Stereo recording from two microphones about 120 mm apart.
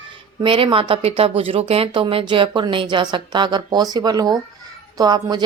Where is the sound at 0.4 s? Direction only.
45° right (ahead or behind).